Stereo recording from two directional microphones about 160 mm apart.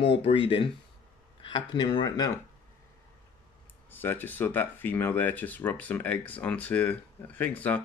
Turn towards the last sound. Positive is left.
turn(degrees=10)  # may be behind; listen again after turning